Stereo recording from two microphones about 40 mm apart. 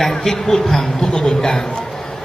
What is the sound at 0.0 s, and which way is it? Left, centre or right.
A man's voice, centre.